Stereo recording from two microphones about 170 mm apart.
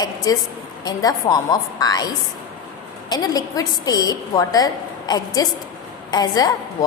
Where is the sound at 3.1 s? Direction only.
20° left (ahead or behind).